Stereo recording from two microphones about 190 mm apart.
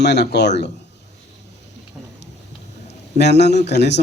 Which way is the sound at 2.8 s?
65° left (ahead or behind).